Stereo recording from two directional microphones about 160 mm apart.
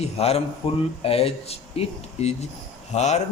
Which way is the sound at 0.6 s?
35° left (ahead or behind).